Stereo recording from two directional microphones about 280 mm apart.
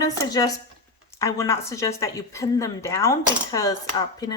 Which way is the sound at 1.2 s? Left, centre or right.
Centre.